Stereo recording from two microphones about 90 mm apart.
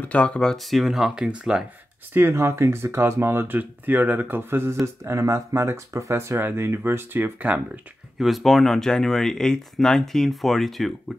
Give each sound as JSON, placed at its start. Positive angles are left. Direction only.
{"t": 0.0, "sound": "speech", "side_deg": 15}
{"t": 2.1, "sound": "speech", "side_deg": -30}
{"t": 8.2, "sound": "speech", "side_deg": 0}